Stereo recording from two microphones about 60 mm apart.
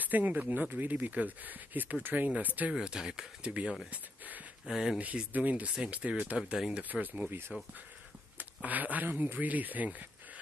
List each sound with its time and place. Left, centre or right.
0.0 s speech: right
2.8 s speech: centre
4.6 s speech: centre
4.9 s speech: right
8.6 s speech: right